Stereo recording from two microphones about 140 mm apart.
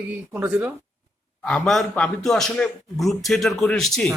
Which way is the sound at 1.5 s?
5° left (ahead or behind).